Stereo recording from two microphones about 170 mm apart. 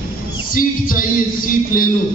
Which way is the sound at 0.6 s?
55° left (ahead or behind).